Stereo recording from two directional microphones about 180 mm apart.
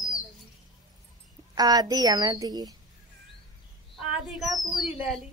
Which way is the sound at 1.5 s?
20° right (ahead or behind).